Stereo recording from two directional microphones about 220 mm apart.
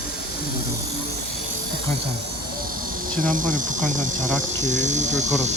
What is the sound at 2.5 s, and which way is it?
Speech, 40° right (ahead or behind).